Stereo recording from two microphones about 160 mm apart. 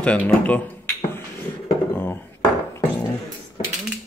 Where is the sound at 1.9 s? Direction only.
10° left (ahead or behind).